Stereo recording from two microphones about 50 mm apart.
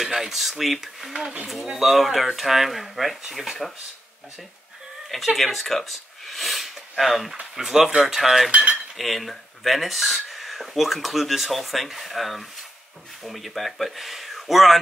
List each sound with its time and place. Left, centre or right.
0.0 s speech: centre
5.1 s speech: centre
8.5 s cutlery: right
8.9 s speech: centre